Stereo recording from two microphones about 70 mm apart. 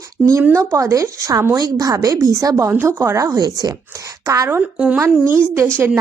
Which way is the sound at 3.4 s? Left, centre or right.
Right.